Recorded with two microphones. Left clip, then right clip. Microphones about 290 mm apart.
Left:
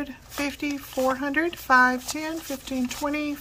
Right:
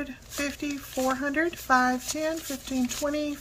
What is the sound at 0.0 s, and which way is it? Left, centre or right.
Speech, centre.